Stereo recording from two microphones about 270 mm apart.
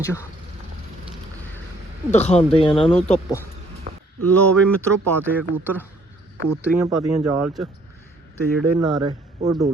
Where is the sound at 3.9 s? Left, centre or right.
Right.